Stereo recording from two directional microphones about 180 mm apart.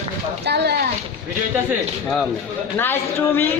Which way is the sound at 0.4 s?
70° right (ahead or behind).